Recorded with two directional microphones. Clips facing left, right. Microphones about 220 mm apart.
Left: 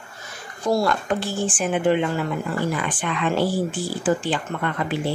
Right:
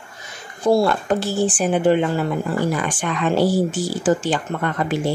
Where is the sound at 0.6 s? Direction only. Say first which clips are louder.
Right 4 dB; 30° right (ahead or behind).